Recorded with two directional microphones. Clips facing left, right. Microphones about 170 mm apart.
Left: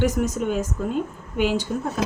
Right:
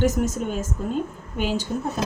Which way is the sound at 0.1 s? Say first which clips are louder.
Left 1 dB; 25° right (ahead or behind).